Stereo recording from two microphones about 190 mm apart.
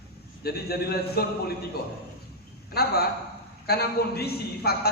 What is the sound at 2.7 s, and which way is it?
A man's voice, 55° left (ahead or behind).